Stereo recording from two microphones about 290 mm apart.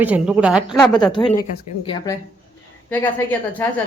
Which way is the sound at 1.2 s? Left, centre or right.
Centre.